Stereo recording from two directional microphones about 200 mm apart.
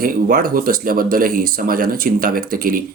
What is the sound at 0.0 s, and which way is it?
Speech, 45° right (ahead or behind).